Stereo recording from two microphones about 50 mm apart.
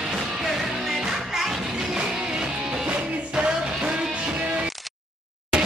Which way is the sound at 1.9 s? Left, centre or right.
Centre.